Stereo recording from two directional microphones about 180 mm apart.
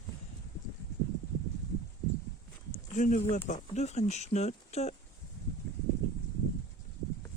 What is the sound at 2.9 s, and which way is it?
Speech, 45° left (ahead or behind).